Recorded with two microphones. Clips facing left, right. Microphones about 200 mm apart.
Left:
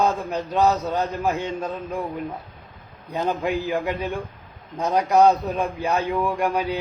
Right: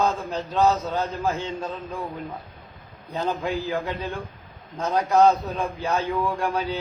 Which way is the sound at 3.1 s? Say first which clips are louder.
Left 2 dB; 15° left (ahead or behind).